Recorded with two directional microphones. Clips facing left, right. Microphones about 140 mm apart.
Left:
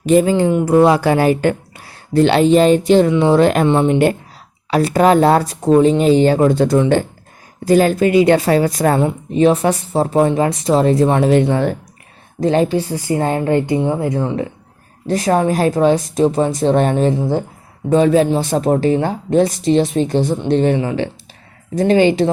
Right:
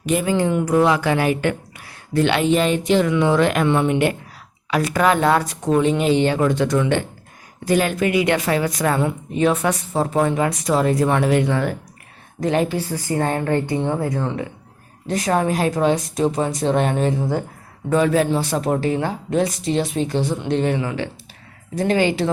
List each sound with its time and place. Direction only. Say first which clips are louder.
0.0 s a woman's voice: left 7 dB; 30° left (ahead or behind)
12.7 s speech: left 5 dB; 20° left (ahead or behind)
14.0 s a woman's voice: left 5 dB; 20° left (ahead or behind)
20.0 s speech: left 5 dB; 45° left (ahead or behind)
20.4 s speech: left 5 dB; 35° left (ahead or behind)